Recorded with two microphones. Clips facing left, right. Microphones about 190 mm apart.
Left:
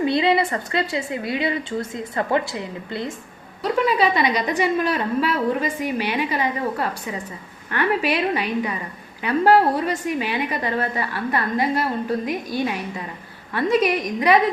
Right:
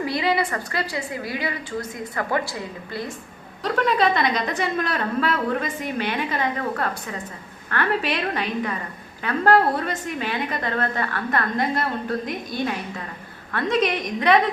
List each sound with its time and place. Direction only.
0.0 s a woman's voice: 25° left (ahead or behind)
3.6 s a woman's voice: 10° left (ahead or behind)